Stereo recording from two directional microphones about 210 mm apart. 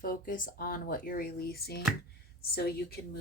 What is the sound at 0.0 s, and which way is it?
Speech, 40° left (ahead or behind).